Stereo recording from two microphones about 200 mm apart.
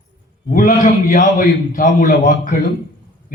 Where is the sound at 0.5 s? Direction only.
45° left (ahead or behind).